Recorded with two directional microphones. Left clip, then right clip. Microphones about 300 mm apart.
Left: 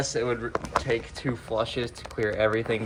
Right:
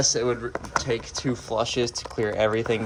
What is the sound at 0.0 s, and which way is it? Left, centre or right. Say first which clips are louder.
Speech: right 4 dB; centre.